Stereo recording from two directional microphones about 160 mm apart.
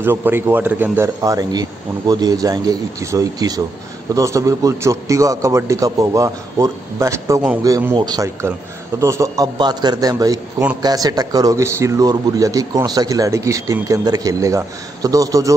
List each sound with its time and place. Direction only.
0.0 s a man's voice: 15° right (ahead or behind)